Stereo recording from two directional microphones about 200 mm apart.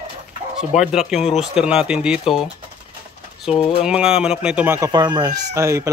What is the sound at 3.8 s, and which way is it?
Speech, 5° right (ahead or behind).